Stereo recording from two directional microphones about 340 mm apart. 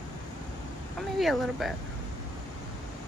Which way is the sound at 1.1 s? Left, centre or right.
Centre.